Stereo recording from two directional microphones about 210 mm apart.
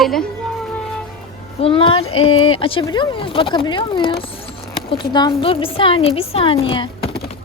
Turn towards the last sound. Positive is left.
turn(degrees=25)  # may be behind; listen again after turning